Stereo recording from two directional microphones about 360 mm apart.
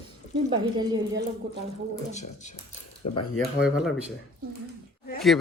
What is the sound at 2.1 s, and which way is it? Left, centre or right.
Speech, centre.